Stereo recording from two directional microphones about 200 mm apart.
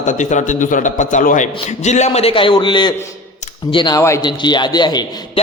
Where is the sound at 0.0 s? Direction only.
40° left (ahead or behind).